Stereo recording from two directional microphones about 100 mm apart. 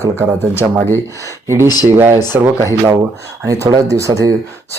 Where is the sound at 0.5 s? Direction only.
25° left (ahead or behind).